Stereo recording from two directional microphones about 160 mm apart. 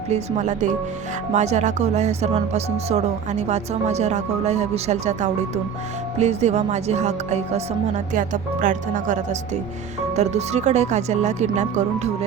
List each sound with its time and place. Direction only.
0.1 s speech: 50° right (ahead or behind)